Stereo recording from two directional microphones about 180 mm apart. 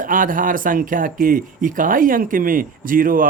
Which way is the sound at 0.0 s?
50° right (ahead or behind).